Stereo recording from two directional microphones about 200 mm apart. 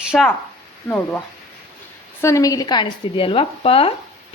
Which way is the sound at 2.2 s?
15° left (ahead or behind).